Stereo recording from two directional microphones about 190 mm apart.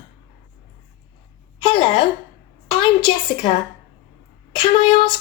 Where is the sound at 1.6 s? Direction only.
25° left (ahead or behind).